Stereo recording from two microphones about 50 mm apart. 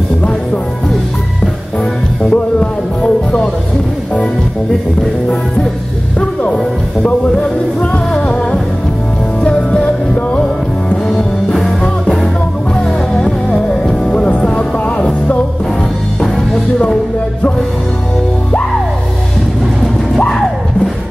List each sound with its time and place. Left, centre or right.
2.3 s music: left
6.1 s speech: left
8.1 s music: centre
12.7 s music: centre
16.2 s music: centre